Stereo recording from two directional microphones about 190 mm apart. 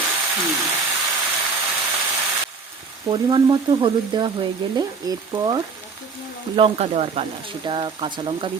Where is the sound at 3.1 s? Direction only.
25° right (ahead or behind).